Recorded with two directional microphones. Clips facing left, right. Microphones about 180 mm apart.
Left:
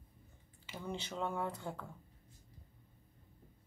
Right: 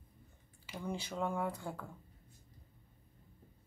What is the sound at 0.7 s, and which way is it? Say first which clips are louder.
Speech: right 2 dB; 10° right (ahead or behind).